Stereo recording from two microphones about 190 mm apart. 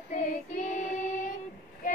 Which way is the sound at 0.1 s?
40° left (ahead or behind).